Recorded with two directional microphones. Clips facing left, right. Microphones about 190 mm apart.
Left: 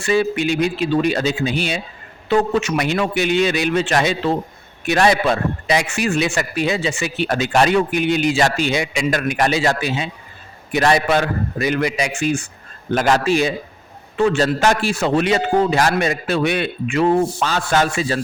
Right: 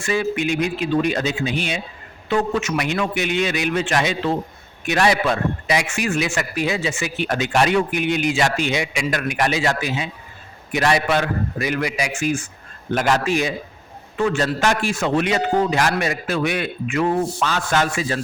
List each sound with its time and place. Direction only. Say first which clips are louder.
0.0 s a man's voice: left 3 dB; 30° left (ahead or behind)